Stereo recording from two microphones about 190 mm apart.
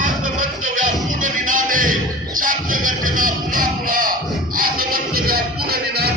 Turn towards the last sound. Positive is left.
turn(degrees=-55)  # may be behind; listen again after turning